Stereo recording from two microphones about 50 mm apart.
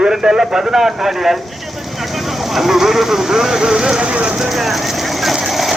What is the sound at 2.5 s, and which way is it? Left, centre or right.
Speech, centre.